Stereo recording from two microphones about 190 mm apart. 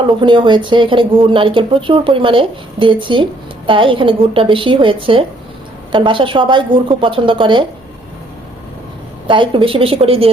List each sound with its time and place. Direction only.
0.2 s speech: 25° right (ahead or behind)
9.2 s speech: 25° right (ahead or behind)